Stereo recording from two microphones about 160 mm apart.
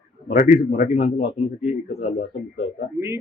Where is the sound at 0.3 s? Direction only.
60° left (ahead or behind).